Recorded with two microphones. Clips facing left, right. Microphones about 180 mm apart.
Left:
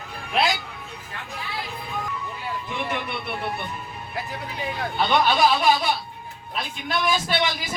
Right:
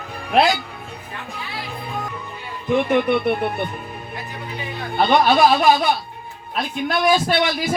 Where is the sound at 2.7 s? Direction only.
55° right (ahead or behind).